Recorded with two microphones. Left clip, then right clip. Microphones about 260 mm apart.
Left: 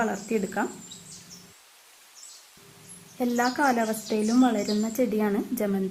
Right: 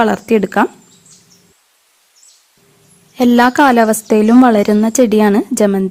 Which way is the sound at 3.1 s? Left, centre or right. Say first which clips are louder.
Right 15 dB; right.